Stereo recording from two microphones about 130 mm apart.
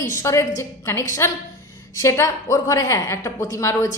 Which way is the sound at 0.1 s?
25° left (ahead or behind).